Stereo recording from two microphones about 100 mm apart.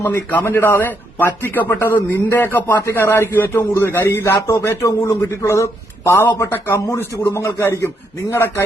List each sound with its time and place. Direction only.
0.0 s a man's voice: 25° left (ahead or behind)